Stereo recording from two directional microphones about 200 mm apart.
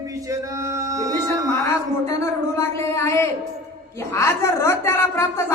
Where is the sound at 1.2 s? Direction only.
15° left (ahead or behind).